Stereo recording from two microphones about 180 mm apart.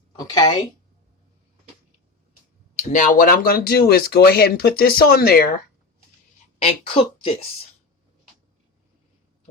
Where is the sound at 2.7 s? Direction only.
45° left (ahead or behind).